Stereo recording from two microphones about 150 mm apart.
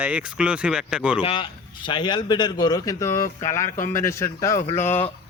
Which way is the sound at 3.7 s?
60° left (ahead or behind).